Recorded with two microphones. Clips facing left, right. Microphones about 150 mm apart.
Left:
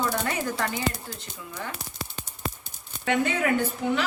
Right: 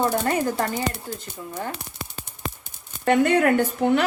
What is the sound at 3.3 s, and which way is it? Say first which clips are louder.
Speech: right 6 dB; 60° right (ahead or behind).